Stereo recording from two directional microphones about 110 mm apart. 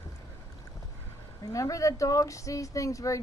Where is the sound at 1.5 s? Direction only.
30° left (ahead or behind).